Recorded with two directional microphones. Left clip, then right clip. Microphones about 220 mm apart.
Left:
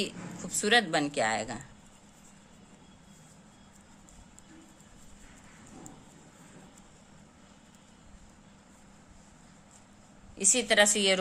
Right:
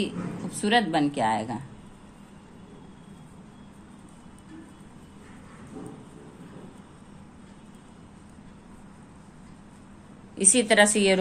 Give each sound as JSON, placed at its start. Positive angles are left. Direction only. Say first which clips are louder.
{"t": 0.0, "sound": "a woman's voice", "louder": "right 4 dB", "side_deg": 35}
{"t": 10.3, "sound": "a woman's voice", "louder": "right 4 dB", "side_deg": 5}